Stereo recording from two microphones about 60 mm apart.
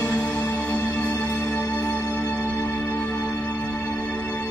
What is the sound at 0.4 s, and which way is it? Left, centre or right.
Music, left.